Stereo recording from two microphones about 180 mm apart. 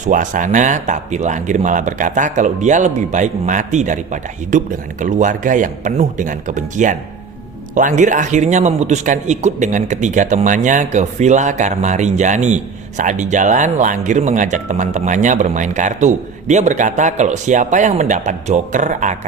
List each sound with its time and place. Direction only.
0.0 s speech: 45° right (ahead or behind)